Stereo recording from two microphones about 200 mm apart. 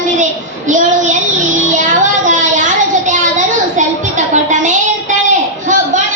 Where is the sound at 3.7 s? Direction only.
40° right (ahead or behind).